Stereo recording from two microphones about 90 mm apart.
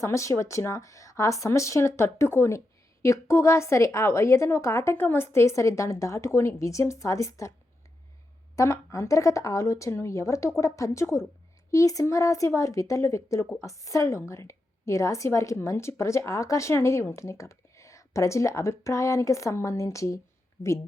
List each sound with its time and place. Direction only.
0.0 s a woman's voice: 35° left (ahead or behind)
8.5 s a woman's voice: 35° left (ahead or behind)